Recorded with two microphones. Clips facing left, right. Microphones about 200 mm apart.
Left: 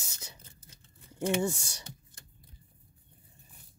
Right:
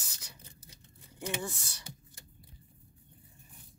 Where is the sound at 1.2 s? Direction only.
30° left (ahead or behind).